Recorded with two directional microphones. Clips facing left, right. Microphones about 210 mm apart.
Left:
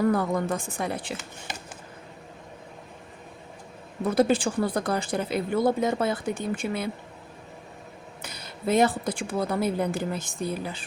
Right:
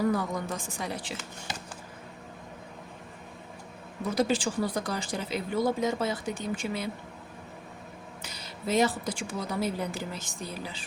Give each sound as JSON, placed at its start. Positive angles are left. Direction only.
{"t": 0.0, "sound": "speech", "side_deg": 55}
{"t": 4.1, "sound": "speech", "side_deg": 55}
{"t": 8.2, "sound": "speech", "side_deg": 55}